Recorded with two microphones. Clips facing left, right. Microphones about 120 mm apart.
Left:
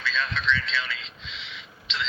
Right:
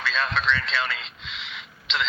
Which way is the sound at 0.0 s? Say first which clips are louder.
Right 3 dB; 55° right (ahead or behind).